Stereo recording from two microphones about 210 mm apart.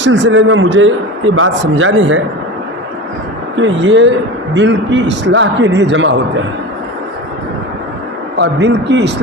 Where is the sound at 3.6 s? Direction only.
65° right (ahead or behind).